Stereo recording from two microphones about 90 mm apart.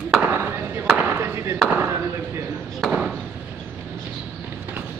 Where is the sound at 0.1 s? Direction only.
25° right (ahead or behind).